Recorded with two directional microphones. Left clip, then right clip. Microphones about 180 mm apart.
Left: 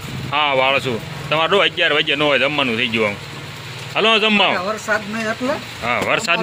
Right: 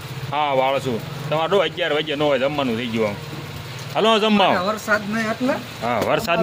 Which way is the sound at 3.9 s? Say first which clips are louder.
Left 2 dB; 20° right (ahead or behind).